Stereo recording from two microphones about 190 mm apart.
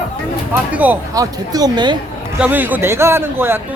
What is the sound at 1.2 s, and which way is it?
Speech, 20° right (ahead or behind).